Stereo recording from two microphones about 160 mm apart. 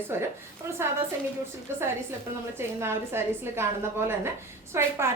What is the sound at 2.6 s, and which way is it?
A woman's voice, 15° right (ahead or behind).